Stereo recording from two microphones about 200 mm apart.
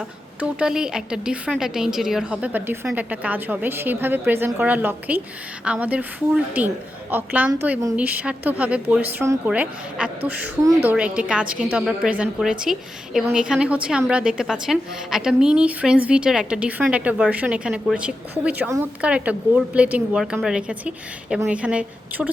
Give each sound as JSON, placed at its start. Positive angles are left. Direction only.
{"t": 0.3, "sound": "a woman's voice", "side_deg": -5}